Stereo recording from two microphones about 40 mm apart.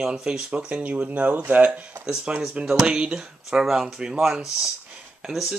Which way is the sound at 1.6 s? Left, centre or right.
Right.